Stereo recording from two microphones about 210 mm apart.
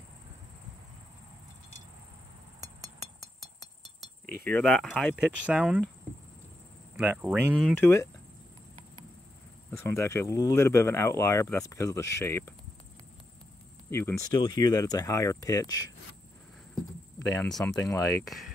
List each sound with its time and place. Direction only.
4.5 s speech: 5° left (ahead or behind)
5.1 s speech: 5° right (ahead or behind)
7.0 s speech: 5° right (ahead or behind)
7.5 s speech: 5° left (ahead or behind)
9.7 s speech: 15° left (ahead or behind)
13.8 s speech: 10° left (ahead or behind)
17.2 s speech: 5° left (ahead or behind)
17.7 s speech: 15° left (ahead or behind)
18.0 s speech: centre (ahead or behind)